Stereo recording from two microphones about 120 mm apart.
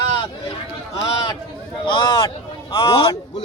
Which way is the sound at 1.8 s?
45° left (ahead or behind).